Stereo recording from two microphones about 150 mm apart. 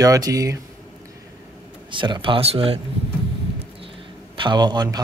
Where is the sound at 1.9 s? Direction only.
35° right (ahead or behind).